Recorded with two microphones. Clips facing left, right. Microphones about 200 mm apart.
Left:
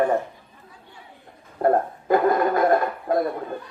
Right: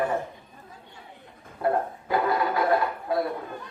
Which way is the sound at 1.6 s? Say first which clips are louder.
Left 5 dB; 45° left (ahead or behind).